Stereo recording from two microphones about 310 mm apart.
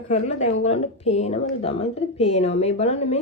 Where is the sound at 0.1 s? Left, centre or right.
Left.